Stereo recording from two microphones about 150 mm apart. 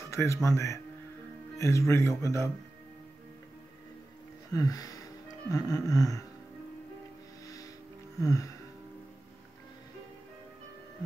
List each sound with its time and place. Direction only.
0.1 s speech: 20° left (ahead or behind)
4.5 s music: 25° left (ahead or behind)
7.4 s music: 25° left (ahead or behind)
8.2 s speech: 20° left (ahead or behind)